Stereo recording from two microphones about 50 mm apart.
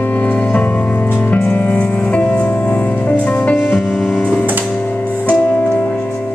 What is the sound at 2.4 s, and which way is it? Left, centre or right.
Music, left.